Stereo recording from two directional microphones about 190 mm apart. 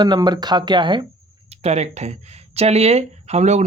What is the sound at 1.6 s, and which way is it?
Speech, 35° right (ahead or behind).